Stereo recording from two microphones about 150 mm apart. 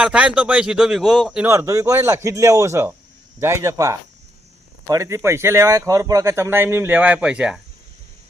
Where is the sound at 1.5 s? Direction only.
20° right (ahead or behind).